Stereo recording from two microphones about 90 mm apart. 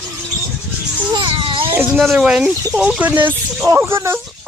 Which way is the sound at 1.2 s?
70° right (ahead or behind).